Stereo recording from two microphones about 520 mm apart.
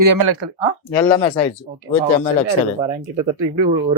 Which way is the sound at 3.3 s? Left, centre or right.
Right.